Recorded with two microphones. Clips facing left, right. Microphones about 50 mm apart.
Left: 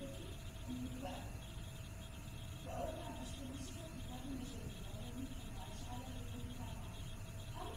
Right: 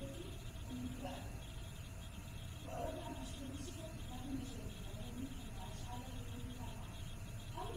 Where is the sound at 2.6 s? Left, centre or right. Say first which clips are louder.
Even; right.